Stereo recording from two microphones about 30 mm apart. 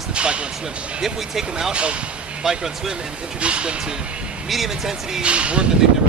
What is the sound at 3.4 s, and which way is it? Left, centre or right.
Speech, right.